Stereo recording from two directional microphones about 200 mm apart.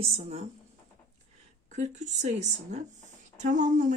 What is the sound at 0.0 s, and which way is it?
Speech, 30° right (ahead or behind).